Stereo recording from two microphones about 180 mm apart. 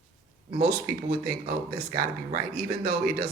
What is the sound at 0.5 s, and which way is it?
Speech, 60° right (ahead or behind).